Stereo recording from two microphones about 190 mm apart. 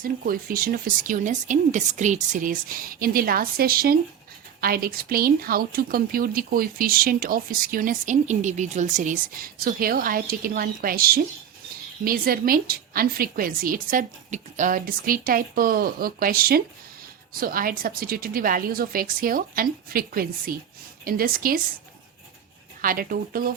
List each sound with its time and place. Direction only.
0.0 s speech: 50° right (ahead or behind)
22.8 s speech: 50° right (ahead or behind)